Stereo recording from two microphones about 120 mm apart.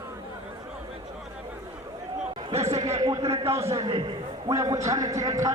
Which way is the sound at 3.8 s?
45° right (ahead or behind).